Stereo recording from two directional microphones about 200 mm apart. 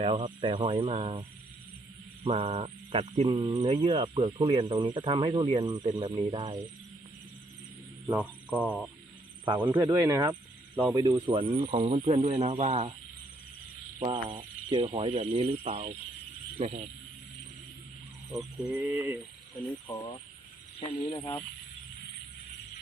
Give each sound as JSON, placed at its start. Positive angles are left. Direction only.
{"t": 0.0, "sound": "speech", "side_deg": -25}
{"t": 2.2, "sound": "speech", "side_deg": -35}
{"t": 8.0, "sound": "speech", "side_deg": -10}
{"t": 9.6, "sound": "a sound", "side_deg": -10}
{"t": 10.9, "sound": "speech", "side_deg": -20}
{"t": 14.0, "sound": "speech", "side_deg": -25}
{"t": 18.3, "sound": "a sound", "side_deg": -10}
{"t": 20.7, "sound": "speech", "side_deg": 30}
{"t": 21.2, "sound": "speech", "side_deg": 10}